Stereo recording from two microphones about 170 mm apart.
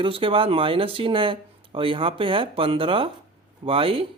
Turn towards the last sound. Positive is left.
turn(degrees=-30)  # may be behind; listen again after turning